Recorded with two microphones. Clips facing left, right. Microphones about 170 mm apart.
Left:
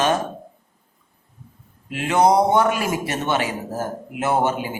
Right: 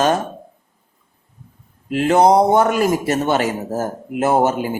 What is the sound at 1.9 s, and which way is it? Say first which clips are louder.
A man's voice: right 4 dB; 40° right (ahead or behind).